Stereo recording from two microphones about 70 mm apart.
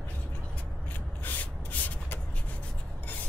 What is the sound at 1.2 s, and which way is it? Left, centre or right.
Rub, left.